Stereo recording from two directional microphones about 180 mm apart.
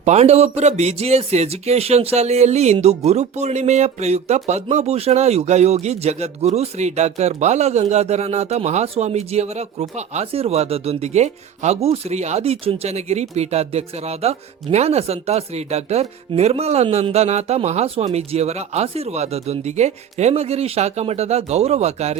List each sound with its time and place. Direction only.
0.0 s speech: 40° right (ahead or behind)